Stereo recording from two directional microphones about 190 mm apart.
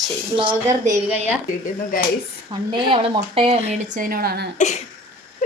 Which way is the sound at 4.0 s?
50° right (ahead or behind).